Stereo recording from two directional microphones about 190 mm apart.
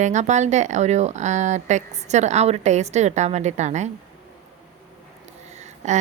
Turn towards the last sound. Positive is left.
turn(degrees=-40)  # may be behind; listen again after turning